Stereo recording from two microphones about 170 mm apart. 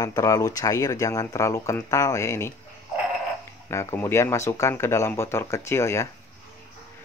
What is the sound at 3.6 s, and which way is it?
Speech, 15° left (ahead or behind).